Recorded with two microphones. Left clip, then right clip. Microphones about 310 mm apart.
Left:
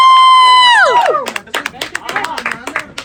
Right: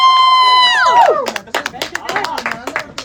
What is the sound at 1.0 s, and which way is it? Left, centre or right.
Clapping, right.